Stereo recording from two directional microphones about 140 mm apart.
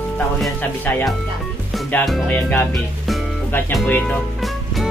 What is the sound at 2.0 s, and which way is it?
Music, 5° left (ahead or behind).